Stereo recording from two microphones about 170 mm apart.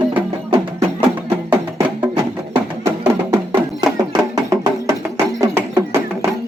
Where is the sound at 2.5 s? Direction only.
15° right (ahead or behind).